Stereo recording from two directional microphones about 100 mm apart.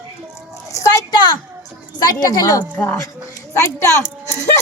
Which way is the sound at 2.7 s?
15° left (ahead or behind).